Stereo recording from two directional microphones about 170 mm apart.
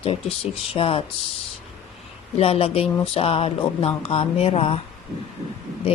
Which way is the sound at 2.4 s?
35° left (ahead or behind).